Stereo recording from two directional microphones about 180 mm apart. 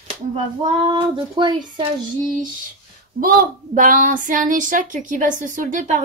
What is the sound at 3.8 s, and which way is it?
Speech, 45° right (ahead or behind).